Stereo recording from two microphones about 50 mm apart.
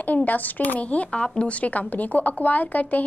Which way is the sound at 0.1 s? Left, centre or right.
Left.